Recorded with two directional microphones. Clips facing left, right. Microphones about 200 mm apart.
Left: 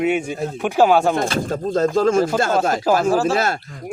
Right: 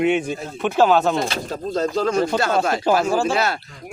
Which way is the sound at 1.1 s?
50° left (ahead or behind).